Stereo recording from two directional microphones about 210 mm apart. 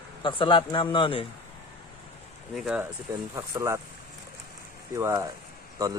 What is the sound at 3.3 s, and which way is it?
Speech, 15° right (ahead or behind).